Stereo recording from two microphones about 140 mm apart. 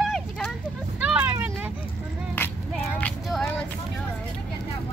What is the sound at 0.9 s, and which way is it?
Vehicle, 10° right (ahead or behind).